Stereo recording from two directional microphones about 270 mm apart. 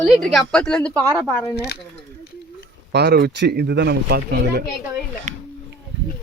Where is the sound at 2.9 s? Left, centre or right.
Right.